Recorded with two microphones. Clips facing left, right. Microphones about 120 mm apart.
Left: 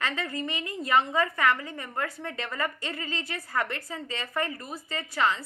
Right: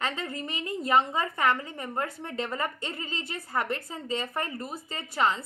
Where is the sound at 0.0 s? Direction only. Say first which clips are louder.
Left 1 dB; 30° right (ahead or behind).